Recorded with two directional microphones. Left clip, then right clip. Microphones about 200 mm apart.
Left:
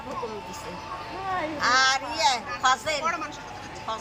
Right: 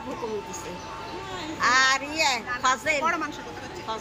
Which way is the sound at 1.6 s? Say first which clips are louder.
Right 2 dB; 5° right (ahead or behind).